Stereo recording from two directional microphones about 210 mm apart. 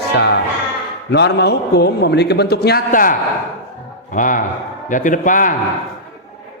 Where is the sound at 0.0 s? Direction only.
50° left (ahead or behind).